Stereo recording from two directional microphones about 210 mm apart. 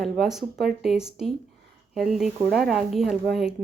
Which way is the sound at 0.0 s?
Centre (ahead or behind).